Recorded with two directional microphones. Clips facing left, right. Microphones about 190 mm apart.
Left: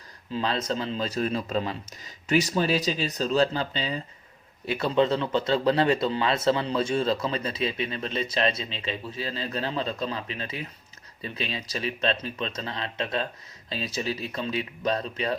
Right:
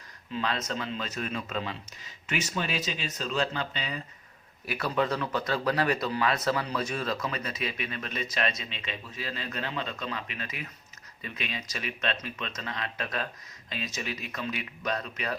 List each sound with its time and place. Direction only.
0.3 s speech: 30° left (ahead or behind)